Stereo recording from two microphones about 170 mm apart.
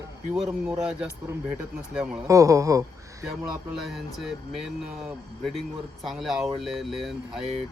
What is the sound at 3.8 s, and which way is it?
Speech, centre (ahead or behind).